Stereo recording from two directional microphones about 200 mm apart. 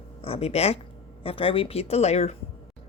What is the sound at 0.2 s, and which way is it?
Speech, 30° left (ahead or behind).